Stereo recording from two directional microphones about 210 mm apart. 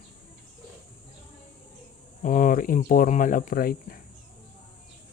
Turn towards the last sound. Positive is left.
turn(degrees=45)  # may be behind; listen again after turning